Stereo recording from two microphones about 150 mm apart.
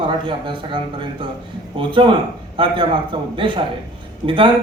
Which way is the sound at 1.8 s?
35° right (ahead or behind).